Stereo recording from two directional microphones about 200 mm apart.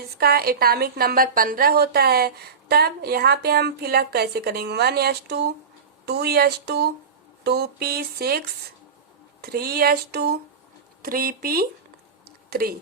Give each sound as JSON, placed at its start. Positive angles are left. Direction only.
{"t": 0.2, "sound": "a woman's voice", "side_deg": -50}
{"t": 9.4, "sound": "a woman's voice", "side_deg": -50}